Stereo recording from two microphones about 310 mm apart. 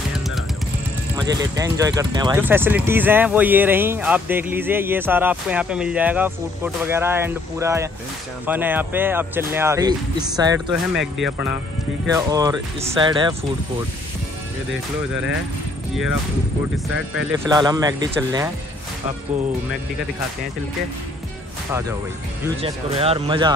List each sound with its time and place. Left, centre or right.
1.1 s speech: centre
10.7 s speech: centre
12.1 s speech: centre
17.5 s speech: centre
22.6 s speech: centre